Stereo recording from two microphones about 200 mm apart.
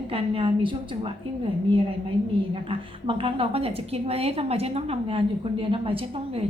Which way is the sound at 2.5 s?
25° right (ahead or behind).